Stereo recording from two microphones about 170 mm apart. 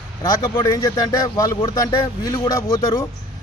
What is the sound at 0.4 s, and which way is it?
Speech, 15° left (ahead or behind).